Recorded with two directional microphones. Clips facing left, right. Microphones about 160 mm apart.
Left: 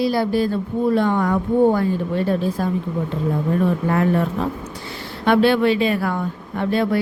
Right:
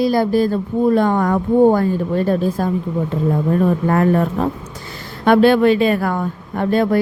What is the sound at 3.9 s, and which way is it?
Speech, 45° right (ahead or behind).